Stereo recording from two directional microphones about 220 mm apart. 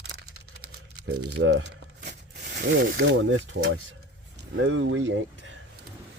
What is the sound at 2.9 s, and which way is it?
Speech, 60° right (ahead or behind).